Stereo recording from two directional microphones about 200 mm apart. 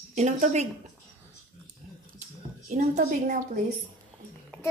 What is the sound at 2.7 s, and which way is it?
A woman's voice, 40° right (ahead or behind).